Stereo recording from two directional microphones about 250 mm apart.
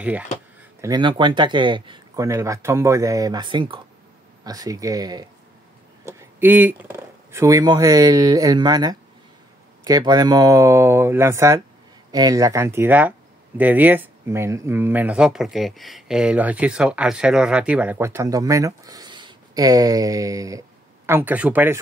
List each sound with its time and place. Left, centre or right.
0.7 s speech: centre